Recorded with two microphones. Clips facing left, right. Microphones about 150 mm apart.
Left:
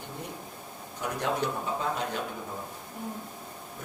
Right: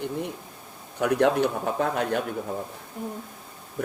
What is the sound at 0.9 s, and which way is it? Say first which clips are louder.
Speech: right 9 dB; 65° right (ahead or behind).